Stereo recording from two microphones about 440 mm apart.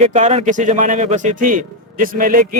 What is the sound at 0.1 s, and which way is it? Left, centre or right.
A man's voice, centre.